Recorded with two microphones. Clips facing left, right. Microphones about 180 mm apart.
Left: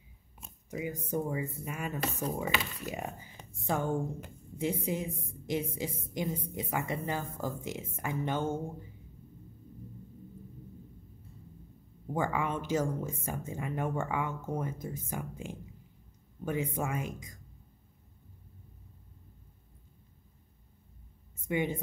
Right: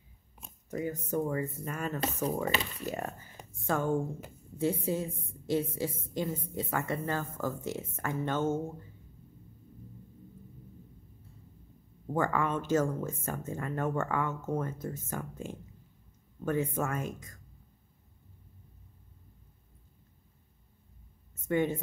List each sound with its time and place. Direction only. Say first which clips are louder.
0.7 s a woman's voice: right 2 dB; 10° left (ahead or behind)
12.1 s a woman's voice: right 2 dB; 15° left (ahead or behind)
21.4 s speech: right 3 dB; 15° left (ahead or behind)